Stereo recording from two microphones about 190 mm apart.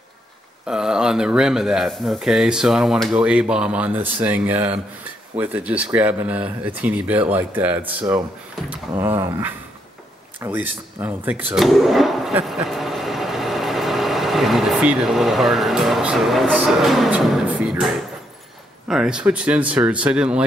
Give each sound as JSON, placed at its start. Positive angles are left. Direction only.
{"t": 0.7, "sound": "speech", "side_deg": -5}